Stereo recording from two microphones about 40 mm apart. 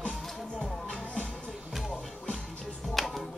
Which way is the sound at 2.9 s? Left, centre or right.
Centre.